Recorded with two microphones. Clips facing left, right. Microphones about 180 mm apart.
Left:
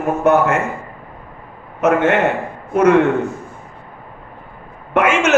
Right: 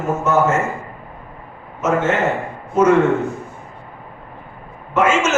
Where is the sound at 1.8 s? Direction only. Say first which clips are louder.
Left 3 dB; 60° left (ahead or behind).